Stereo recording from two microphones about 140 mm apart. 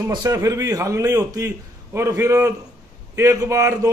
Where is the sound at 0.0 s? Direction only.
25° right (ahead or behind).